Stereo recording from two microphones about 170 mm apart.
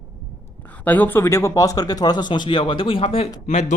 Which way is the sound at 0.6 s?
10° left (ahead or behind).